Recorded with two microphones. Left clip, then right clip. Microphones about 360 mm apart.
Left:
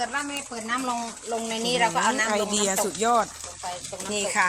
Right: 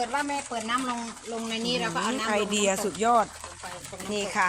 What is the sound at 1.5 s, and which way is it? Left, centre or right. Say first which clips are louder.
Speech: left 5 dB; centre.